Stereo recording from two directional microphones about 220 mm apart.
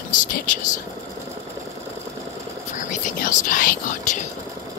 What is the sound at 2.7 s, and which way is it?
Speech, 35° left (ahead or behind).